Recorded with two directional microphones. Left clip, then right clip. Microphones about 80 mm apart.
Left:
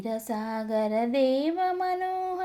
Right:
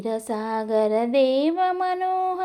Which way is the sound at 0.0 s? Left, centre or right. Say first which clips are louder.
Right 5 dB; centre.